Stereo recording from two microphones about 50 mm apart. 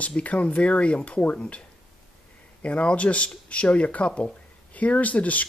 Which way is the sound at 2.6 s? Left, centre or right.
Left.